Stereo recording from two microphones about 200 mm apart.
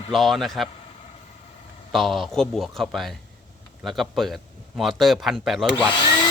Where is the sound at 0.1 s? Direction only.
Centre (ahead or behind).